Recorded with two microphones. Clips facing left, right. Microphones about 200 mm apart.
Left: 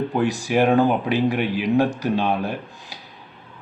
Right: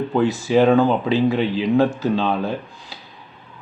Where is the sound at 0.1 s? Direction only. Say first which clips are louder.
Right 3 dB; 15° left (ahead or behind).